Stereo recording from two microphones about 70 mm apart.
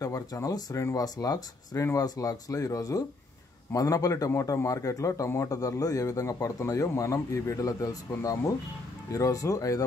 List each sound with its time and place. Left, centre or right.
0.0 s speech: left
5.6 s speech: left